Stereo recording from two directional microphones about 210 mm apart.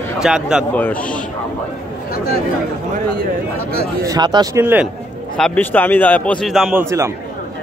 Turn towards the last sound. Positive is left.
turn(degrees=-15)  # may be behind; listen again after turning